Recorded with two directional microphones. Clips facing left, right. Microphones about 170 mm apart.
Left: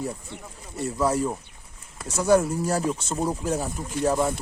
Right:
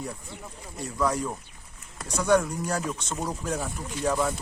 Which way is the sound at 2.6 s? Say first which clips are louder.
Left 5 dB; 30° left (ahead or behind).